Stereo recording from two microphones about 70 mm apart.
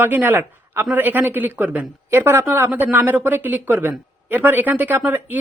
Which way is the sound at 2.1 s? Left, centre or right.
Right.